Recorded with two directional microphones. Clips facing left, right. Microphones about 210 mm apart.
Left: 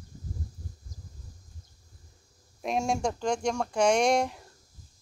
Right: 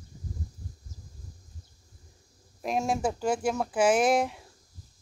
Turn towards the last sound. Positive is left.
turn(degrees=0)  # may be behind; listen again after turning